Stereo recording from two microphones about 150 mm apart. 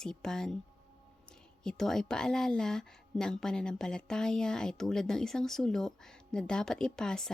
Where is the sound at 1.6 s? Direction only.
5° left (ahead or behind).